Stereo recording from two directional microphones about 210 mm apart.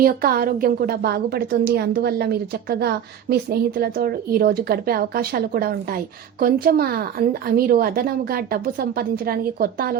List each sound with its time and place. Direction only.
0.0 s a woman's voice: 45° right (ahead or behind)